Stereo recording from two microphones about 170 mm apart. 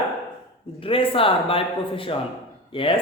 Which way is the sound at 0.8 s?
30° left (ahead or behind).